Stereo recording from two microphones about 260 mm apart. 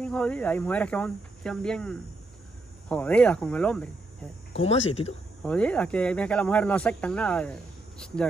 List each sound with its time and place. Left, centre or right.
0.0 s speech: centre
4.6 s speech: left
5.4 s speech: centre